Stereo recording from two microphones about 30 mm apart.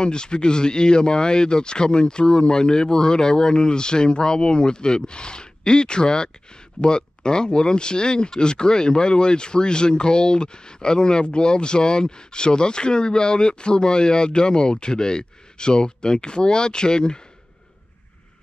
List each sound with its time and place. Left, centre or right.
0.0 s speech: left